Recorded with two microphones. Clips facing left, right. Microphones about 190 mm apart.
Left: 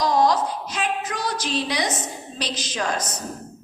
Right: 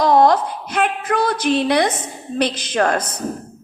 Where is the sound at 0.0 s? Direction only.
60° right (ahead or behind).